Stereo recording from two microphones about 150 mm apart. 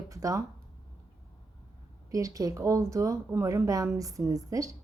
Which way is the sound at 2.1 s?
20° right (ahead or behind).